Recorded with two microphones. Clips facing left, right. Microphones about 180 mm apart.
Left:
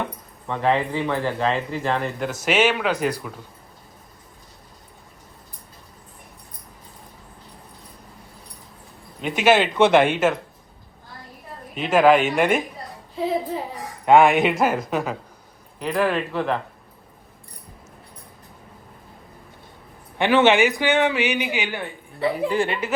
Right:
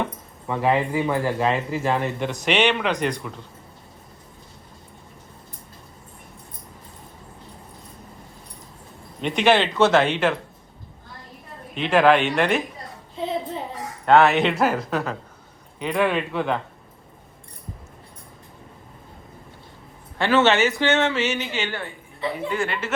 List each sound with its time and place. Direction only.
0.0 s speech: 5° right (ahead or behind)
9.2 s a man's voice: 5° left (ahead or behind)
11.7 s a man's voice: 5° left (ahead or behind)
13.1 s a sound: 5° left (ahead or behind)
14.4 s speech: 5° left (ahead or behind)
20.1 s a man's voice: 15° left (ahead or behind)
22.4 s speech: 30° left (ahead or behind)